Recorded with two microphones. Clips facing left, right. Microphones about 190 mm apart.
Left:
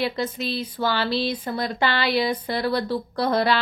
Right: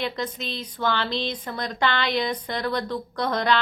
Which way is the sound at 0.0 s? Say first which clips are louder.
Left 4 dB; 5° left (ahead or behind).